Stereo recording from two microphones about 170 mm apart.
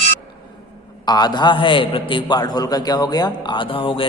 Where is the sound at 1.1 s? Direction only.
25° left (ahead or behind).